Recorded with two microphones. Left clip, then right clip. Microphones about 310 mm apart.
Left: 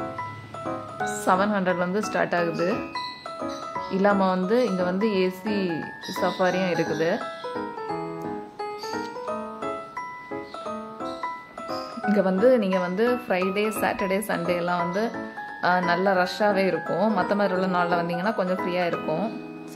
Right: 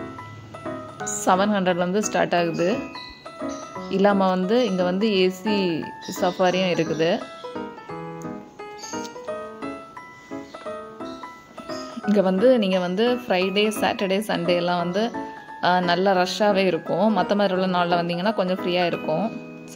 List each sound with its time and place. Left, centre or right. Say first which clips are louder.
1.2 s speech: right 3 dB; centre
3.9 s speech: right 3 dB; centre
12.1 s speech: right 2 dB; centre